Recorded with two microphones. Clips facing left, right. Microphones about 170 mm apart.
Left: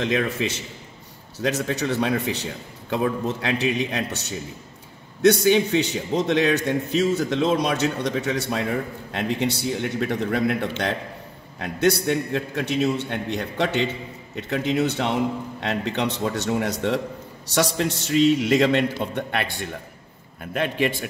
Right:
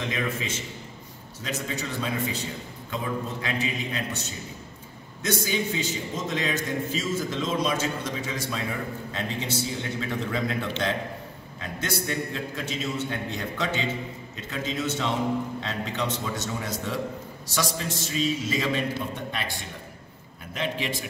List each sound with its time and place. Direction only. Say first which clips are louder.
0.0 s a man's voice: left 7 dB; 70° left (ahead or behind)
20.5 s a man's voice: left 6 dB; 55° left (ahead or behind)